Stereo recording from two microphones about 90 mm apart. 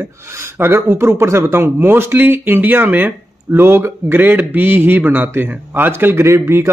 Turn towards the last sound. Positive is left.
turn(degrees=-30)  # may be behind; listen again after turning